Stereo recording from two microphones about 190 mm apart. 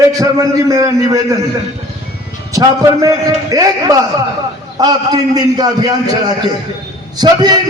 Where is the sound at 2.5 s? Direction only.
15° right (ahead or behind).